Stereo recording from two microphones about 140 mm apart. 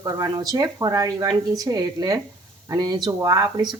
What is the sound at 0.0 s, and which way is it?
Speech, 25° right (ahead or behind).